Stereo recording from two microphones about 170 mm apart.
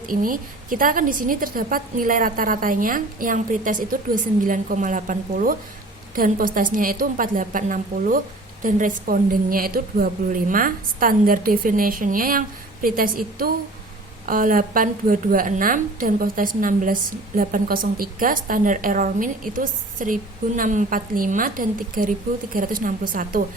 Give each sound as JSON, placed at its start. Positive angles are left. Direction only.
{"t": 0.0, "sound": "a woman's voice", "side_deg": -55}